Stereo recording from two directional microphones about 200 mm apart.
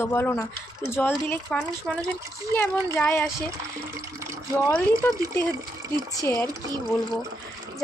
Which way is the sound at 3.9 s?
15° right (ahead or behind).